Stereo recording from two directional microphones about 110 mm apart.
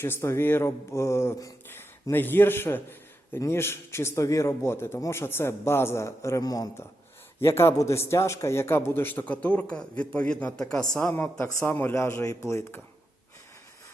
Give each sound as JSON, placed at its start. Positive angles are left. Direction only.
{"t": 0.0, "sound": "a man's voice", "side_deg": 25}
{"t": 7.3, "sound": "a man's voice", "side_deg": 25}
{"t": 11.1, "sound": "a man's voice", "side_deg": 20}